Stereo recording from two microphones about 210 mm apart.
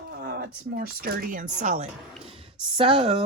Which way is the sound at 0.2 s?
45° right (ahead or behind).